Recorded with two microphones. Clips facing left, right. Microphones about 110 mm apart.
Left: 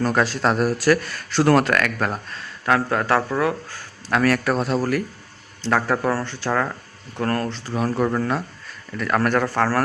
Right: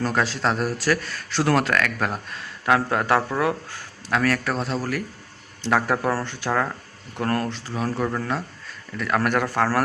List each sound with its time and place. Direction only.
0.0 s speech: centre (ahead or behind)
2.6 s speech: 15° right (ahead or behind)
4.1 s speech: 5° left (ahead or behind)
5.6 s speech: 10° right (ahead or behind)
6.5 s speech: 5° right (ahead or behind)
7.7 s speech: 5° left (ahead or behind)